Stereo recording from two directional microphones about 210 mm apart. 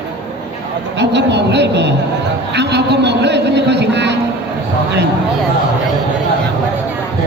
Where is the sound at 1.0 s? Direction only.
55° right (ahead or behind).